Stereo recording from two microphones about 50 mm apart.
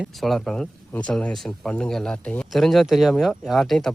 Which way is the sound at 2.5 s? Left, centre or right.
Centre.